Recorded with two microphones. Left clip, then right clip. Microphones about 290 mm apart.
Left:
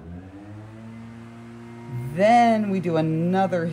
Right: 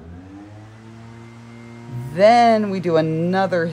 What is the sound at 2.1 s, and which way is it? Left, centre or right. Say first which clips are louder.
Speech: right 5 dB; right.